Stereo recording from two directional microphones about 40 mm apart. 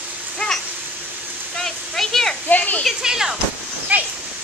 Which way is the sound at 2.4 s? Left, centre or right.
Left.